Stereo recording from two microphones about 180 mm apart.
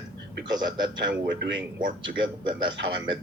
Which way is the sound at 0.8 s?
75° right (ahead or behind).